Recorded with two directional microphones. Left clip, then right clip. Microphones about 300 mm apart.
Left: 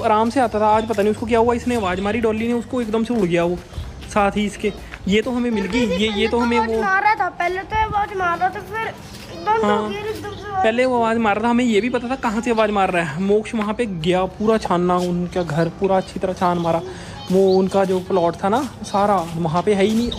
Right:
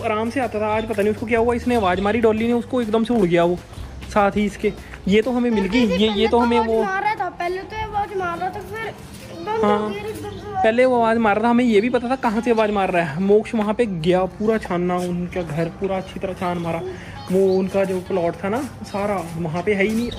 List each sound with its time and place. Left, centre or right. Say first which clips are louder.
0.0 s speech: left 5 dB; centre
19.6 s speech: left 2 dB; left